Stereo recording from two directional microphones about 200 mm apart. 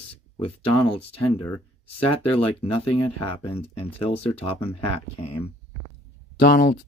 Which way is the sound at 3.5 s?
30° left (ahead or behind).